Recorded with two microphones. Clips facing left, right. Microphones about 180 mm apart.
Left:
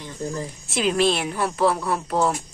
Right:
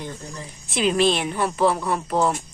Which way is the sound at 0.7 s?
Centre (ahead or behind).